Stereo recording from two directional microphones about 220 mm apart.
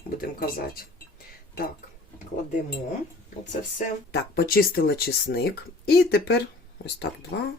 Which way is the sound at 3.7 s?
45° left (ahead or behind).